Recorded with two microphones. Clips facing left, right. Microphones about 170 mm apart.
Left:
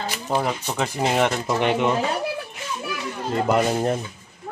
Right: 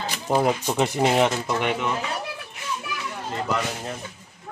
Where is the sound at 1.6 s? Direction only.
30° left (ahead or behind).